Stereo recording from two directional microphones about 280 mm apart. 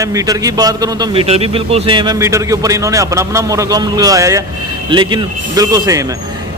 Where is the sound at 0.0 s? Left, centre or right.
Centre.